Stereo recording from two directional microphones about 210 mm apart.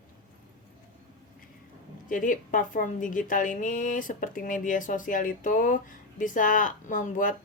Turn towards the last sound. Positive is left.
turn(degrees=40)  # may be behind; listen again after turning